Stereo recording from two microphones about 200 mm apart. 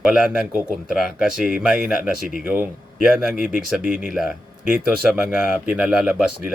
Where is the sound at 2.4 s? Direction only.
10° right (ahead or behind).